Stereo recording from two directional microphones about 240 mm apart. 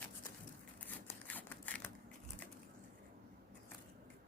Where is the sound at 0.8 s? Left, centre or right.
Centre.